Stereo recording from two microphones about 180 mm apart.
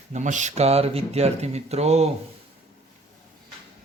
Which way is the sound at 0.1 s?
40° right (ahead or behind).